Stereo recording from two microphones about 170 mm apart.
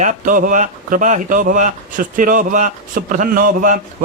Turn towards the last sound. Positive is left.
turn(degrees=-50)  # may be behind; listen again after turning